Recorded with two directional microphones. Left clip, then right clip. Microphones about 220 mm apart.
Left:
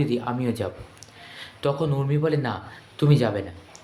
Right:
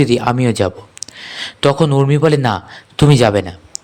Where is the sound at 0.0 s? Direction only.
50° right (ahead or behind).